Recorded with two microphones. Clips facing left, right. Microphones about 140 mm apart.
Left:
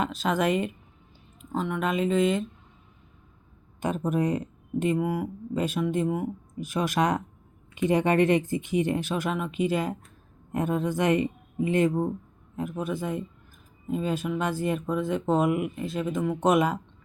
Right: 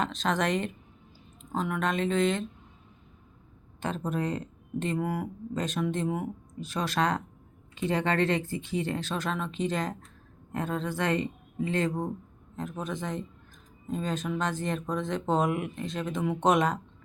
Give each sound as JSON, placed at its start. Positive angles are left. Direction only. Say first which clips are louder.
{"t": 0.0, "sound": "speech", "louder": "left 3 dB", "side_deg": 5}
{"t": 3.8, "sound": "speech", "louder": "left 5 dB", "side_deg": 15}